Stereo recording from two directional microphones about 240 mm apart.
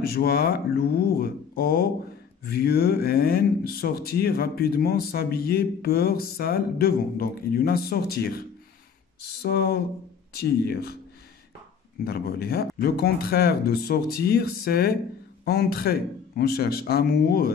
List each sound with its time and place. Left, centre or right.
0.0 s speech: left
12.0 s speech: left